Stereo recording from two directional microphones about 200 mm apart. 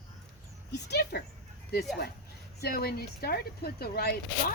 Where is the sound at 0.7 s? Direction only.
55° left (ahead or behind).